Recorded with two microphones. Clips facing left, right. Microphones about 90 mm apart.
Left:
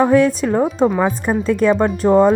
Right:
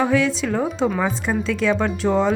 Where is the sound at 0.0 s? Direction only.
45° left (ahead or behind).